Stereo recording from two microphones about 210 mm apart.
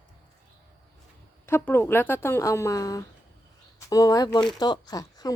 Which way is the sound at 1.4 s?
10° left (ahead or behind).